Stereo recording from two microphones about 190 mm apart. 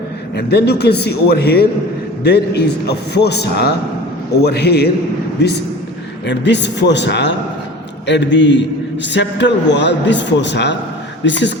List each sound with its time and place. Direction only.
0.3 s a man's voice: 60° left (ahead or behind)
6.2 s a man's voice: 65° left (ahead or behind)